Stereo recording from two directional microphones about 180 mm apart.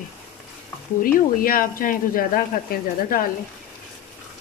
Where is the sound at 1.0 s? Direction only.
50° left (ahead or behind).